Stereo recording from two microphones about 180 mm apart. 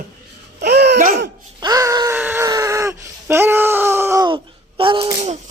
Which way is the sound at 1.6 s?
20° right (ahead or behind).